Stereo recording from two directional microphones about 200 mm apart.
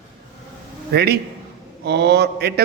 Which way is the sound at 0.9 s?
55° right (ahead or behind).